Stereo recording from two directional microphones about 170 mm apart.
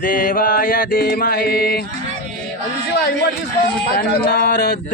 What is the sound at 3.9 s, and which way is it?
Music, 60° left (ahead or behind).